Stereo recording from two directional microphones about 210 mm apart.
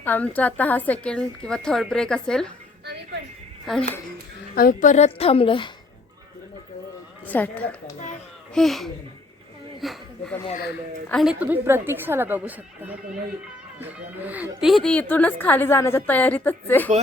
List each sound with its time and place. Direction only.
0.0 s a woman's voice: 10° left (ahead or behind)
3.7 s a woman's voice: centre (ahead or behind)
4.5 s a woman's voice: 45° left (ahead or behind); by 5.7 s 25° left (ahead or behind)
7.3 s a woman's voice: 10° left (ahead or behind)